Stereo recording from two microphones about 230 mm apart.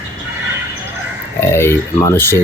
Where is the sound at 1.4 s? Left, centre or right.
Centre.